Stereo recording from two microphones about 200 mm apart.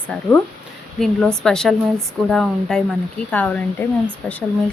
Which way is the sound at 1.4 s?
5° left (ahead or behind).